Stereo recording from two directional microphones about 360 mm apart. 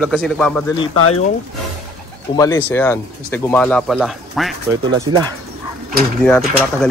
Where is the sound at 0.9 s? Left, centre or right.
Left.